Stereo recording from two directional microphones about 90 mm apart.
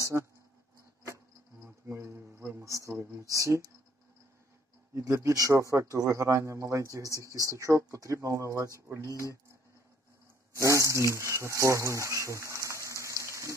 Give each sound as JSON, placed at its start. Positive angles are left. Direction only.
{"t": 0.0, "sound": "speech", "side_deg": -30}
{"t": 1.9, "sound": "speech", "side_deg": -30}
{"t": 4.9, "sound": "speech", "side_deg": -35}
{"t": 10.5, "sound": "speech", "side_deg": -35}
{"t": 13.3, "sound": "a sound", "side_deg": -35}